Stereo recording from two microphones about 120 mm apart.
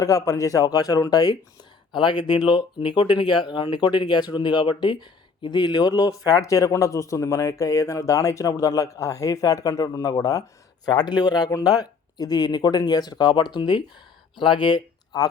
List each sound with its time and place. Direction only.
0.0 s speech: 25° left (ahead or behind)